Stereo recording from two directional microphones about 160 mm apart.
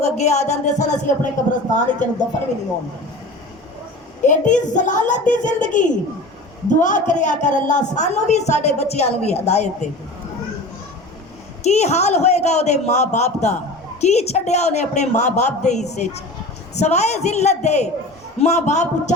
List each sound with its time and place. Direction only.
0.0 s a woman's voice: 45° left (ahead or behind)
4.2 s a woman's voice: 50° left (ahead or behind)
11.6 s a woman's voice: 45° left (ahead or behind)